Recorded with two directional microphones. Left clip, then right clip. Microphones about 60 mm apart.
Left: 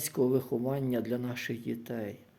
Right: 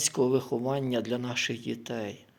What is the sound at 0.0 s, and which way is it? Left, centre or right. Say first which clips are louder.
Speech: right 3 dB; left.